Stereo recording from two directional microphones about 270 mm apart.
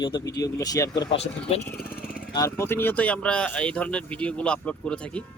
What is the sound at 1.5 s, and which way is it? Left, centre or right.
Speech, left.